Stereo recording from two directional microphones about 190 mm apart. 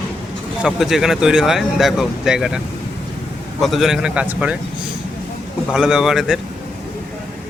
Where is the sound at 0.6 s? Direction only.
5° right (ahead or behind).